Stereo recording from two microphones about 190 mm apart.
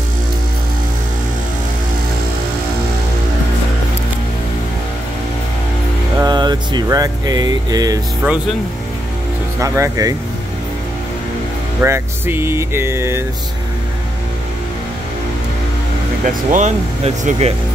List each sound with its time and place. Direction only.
6.1 s music: 20° right (ahead or behind)
8.2 s speech: 5° right (ahead or behind)
9.6 s music: 15° right (ahead or behind)
11.8 s music: 10° right (ahead or behind)
16.5 s speech: 40° right (ahead or behind)